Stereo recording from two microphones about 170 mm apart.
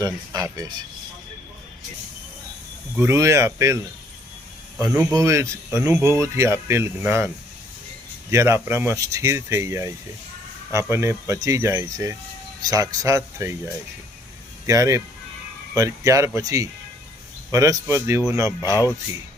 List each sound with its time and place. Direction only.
0.0 s speech: 20° right (ahead or behind)
2.9 s speech: 15° right (ahead or behind)
4.9 s speech: 5° right (ahead or behind)
5.1 s speech: 20° right (ahead or behind)
8.3 s speech: 15° right (ahead or behind)
14.7 s speech: 20° right (ahead or behind)